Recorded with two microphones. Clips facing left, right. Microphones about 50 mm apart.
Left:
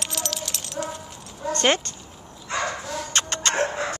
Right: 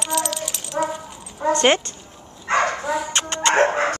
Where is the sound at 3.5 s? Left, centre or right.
Right.